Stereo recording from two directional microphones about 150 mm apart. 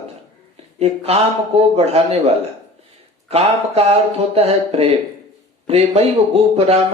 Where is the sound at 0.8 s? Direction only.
45° right (ahead or behind).